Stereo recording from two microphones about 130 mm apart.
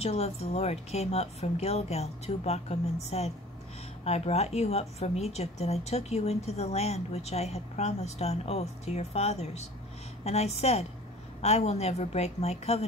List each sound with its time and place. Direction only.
0.0 s a woman's voice: 50° left (ahead or behind)